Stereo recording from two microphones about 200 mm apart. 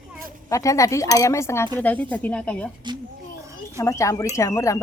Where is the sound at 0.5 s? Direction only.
15° left (ahead or behind).